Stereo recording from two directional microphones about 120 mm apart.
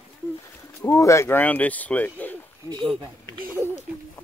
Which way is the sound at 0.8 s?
25° left (ahead or behind).